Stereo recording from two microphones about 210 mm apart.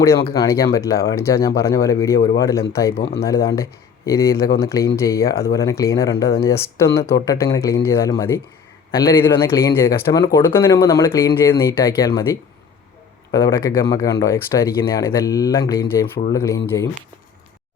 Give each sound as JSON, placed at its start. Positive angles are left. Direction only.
{"t": 0.0, "sound": "speech", "side_deg": 15}